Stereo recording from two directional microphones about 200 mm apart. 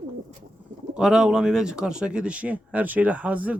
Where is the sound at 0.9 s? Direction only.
Centre (ahead or behind).